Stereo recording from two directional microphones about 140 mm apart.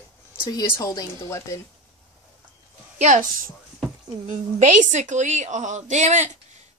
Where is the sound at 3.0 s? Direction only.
65° right (ahead or behind).